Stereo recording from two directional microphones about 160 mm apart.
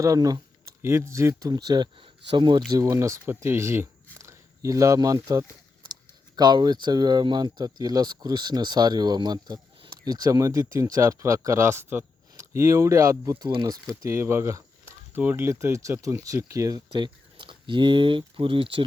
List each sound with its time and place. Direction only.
0.0 s speech: 20° right (ahead or behind)
2.8 s speech: 20° right (ahead or behind)